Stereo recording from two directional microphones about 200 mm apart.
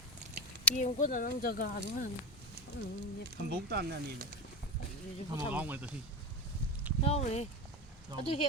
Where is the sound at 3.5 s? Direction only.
55° right (ahead or behind).